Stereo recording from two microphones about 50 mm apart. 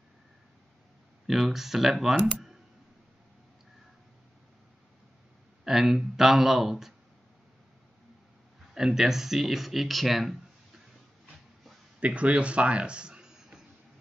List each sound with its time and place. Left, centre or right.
1.2 s speech: centre
5.6 s speech: centre
8.7 s speech: centre
12.0 s speech: right